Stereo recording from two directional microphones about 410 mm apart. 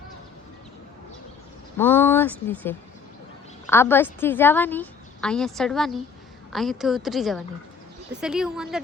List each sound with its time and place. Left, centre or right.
1.8 s a woman's voice: centre